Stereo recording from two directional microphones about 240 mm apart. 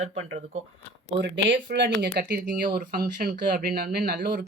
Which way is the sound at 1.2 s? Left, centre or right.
Right.